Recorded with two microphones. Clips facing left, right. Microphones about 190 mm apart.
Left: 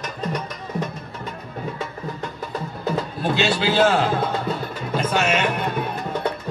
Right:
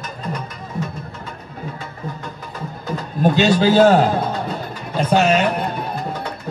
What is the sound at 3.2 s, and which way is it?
A man's voice, 45° right (ahead or behind).